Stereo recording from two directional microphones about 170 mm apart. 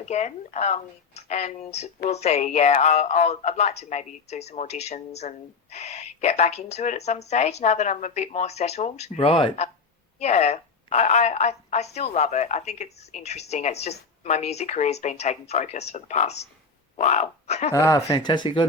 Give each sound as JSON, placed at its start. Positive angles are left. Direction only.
{"t": 0.0, "sound": "a woman's voice", "side_deg": 40}
{"t": 17.7, "sound": "speech", "side_deg": 20}